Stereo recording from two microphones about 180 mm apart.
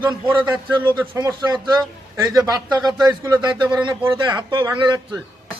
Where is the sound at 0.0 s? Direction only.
10° right (ahead or behind).